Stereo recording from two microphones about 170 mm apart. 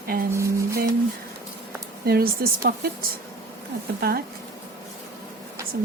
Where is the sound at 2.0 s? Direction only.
65° right (ahead or behind).